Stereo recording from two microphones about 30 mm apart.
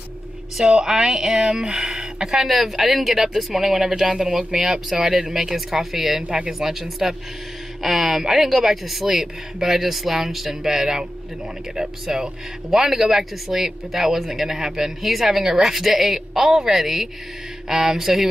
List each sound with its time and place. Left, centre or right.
0.8 s speech: centre